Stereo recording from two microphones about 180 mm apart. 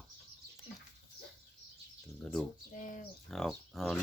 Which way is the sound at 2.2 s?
5° left (ahead or behind).